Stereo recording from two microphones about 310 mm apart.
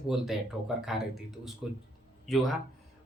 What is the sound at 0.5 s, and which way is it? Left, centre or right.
Speech, centre.